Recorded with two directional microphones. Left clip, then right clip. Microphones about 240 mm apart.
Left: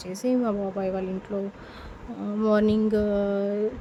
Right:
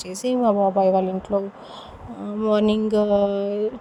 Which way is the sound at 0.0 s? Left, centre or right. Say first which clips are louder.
Right 5 dB; right.